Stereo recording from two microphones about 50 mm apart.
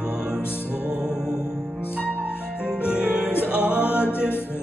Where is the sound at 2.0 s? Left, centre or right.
Left.